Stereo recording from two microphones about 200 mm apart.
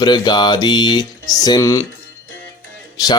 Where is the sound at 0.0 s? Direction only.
20° left (ahead or behind).